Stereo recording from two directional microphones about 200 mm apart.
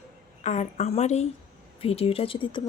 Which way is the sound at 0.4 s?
35° left (ahead or behind).